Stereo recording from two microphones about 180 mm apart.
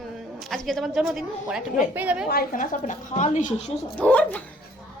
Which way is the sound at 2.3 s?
55° left (ahead or behind).